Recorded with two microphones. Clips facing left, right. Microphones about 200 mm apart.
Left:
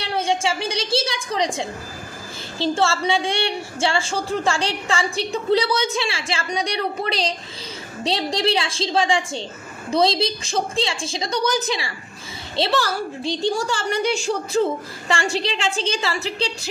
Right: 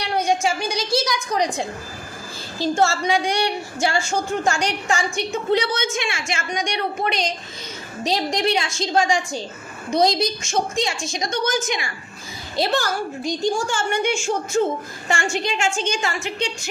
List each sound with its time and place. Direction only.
0.0 s a woman's voice: 25° left (ahead or behind)